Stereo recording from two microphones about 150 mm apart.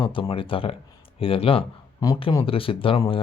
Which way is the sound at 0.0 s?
35° left (ahead or behind).